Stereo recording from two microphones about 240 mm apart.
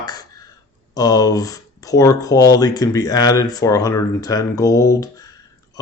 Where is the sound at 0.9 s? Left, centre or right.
Centre.